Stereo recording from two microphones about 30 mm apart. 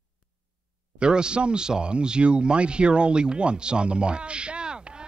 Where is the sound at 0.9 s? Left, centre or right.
Right.